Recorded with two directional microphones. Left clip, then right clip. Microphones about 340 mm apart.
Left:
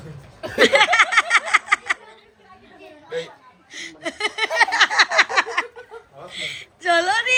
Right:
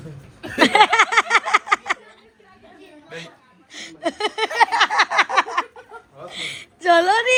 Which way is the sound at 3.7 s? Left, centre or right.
Centre.